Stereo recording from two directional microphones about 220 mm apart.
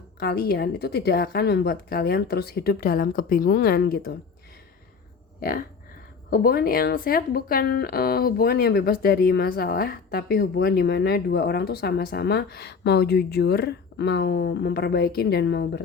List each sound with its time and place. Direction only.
0.2 s speech: 45° left (ahead or behind)
5.4 s speech: 40° left (ahead or behind)